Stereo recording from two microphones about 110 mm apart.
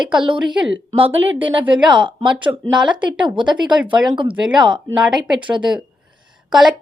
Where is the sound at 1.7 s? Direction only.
45° right (ahead or behind).